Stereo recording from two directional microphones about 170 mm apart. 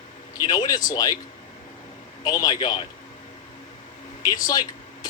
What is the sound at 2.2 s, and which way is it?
Speech, 20° left (ahead or behind).